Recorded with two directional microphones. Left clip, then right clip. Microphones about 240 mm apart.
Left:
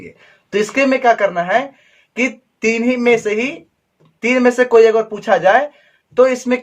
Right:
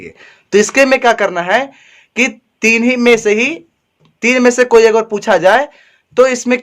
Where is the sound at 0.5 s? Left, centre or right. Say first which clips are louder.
Right 6 dB; right.